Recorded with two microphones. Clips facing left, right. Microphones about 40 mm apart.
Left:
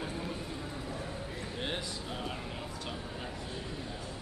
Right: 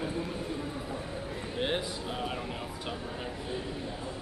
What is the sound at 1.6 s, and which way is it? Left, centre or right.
Speech, centre.